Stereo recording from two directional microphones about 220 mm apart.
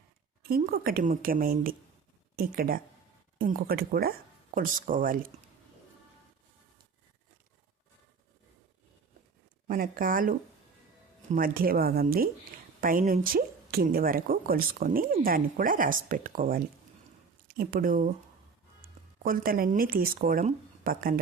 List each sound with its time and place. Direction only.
0.4 s speech: 40° right (ahead or behind)
9.6 s speech: 40° right (ahead or behind)